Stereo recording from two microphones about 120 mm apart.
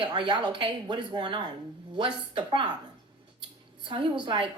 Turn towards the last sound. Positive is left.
turn(degrees=-40)  # may be behind; listen again after turning